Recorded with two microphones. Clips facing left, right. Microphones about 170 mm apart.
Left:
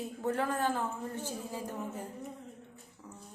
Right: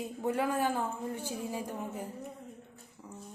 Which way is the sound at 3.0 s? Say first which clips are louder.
Right 2 dB; 15° right (ahead or behind).